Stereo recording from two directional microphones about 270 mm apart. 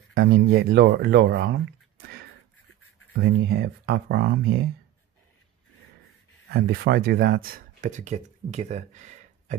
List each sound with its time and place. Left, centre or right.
0.1 s speech: right
3.2 s speech: right
6.5 s speech: right